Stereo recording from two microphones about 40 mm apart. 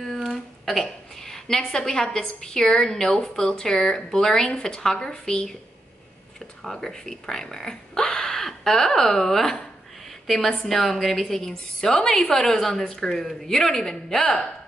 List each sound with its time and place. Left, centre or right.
0.3 s a woman's voice: centre
6.6 s a woman's voice: centre